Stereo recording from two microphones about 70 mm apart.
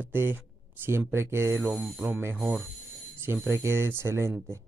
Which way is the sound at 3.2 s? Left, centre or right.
Right.